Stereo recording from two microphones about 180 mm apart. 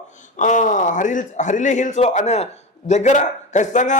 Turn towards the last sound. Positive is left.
turn(degrees=45)  # may be behind; listen again after turning